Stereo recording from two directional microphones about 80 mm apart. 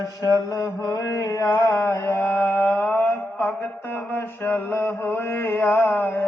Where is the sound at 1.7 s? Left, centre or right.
Left.